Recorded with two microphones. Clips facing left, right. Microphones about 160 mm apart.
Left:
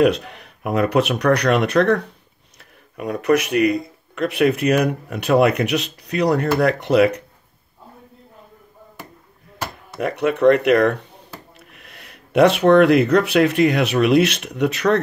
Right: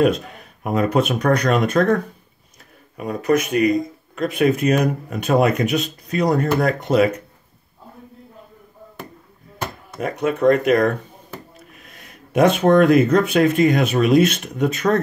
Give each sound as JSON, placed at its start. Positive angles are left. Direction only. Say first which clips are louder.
{"t": 0.0, "sound": "speech", "louder": "left 1 dB", "side_deg": 65}
{"t": 3.0, "sound": "speech", "louder": "left 1 dB", "side_deg": 65}
{"t": 9.9, "sound": "speech", "louder": "left 1 dB", "side_deg": 65}